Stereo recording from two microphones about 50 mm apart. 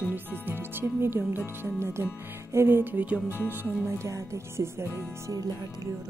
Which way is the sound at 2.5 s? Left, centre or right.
Right.